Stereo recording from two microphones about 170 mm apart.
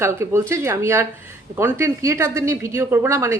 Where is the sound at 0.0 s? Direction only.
15° right (ahead or behind).